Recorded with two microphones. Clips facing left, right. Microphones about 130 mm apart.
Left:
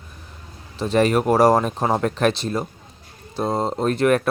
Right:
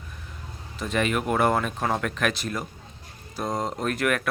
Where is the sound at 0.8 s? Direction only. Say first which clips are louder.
Left 8 dB; 35° left (ahead or behind).